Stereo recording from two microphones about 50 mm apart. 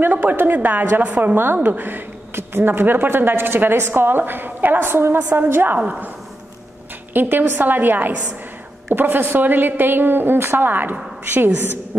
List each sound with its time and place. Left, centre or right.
0.0 s a woman's voice: right
1.0 s a woman's voice: right
1.3 s speech: right
7.2 s a woman's voice: right